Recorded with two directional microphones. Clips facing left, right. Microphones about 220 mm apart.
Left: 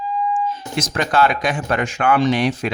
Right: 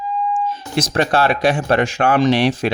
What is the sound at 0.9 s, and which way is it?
Speech, 30° right (ahead or behind).